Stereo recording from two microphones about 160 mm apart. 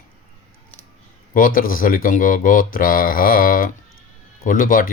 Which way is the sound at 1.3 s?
60° left (ahead or behind).